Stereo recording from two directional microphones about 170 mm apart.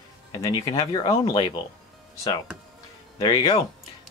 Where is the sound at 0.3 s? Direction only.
25° left (ahead or behind).